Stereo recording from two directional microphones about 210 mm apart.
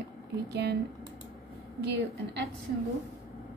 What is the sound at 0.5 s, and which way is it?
Speech, 50° right (ahead or behind).